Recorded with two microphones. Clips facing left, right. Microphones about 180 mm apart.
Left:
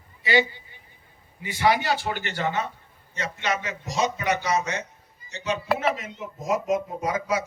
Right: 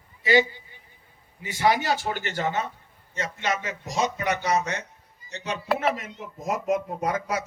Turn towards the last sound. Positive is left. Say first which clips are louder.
# left 1 dB
turn(degrees=-55)  # may be behind; listen again after turning